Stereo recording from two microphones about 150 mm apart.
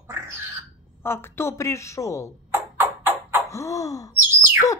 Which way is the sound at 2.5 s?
15° right (ahead or behind).